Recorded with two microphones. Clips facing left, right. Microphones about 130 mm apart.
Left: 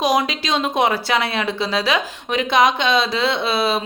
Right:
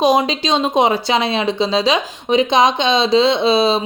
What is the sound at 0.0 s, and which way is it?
Speech, 25° right (ahead or behind).